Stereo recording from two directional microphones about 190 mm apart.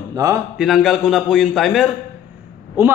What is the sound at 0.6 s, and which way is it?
A man's voice, centre (ahead or behind).